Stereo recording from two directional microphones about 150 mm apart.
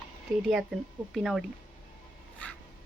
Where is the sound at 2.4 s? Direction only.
10° left (ahead or behind).